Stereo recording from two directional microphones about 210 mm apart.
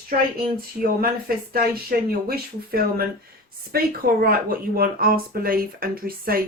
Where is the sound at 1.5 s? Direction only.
45° right (ahead or behind).